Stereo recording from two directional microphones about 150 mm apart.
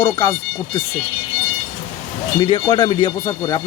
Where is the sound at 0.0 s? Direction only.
35° left (ahead or behind).